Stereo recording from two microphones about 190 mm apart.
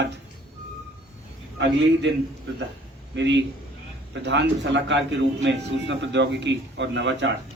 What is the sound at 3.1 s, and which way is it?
A man's voice, 70° right (ahead or behind).